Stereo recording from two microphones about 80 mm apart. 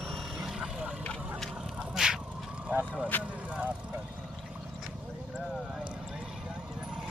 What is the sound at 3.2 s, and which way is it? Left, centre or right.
Speech, centre.